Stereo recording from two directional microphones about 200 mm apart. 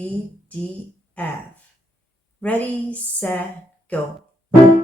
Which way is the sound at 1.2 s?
5° left (ahead or behind).